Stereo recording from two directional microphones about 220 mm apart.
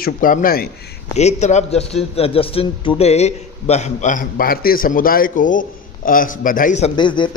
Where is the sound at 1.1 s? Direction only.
30° left (ahead or behind).